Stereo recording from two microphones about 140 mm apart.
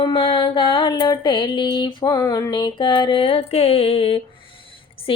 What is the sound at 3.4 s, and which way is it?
Music, 50° left (ahead or behind).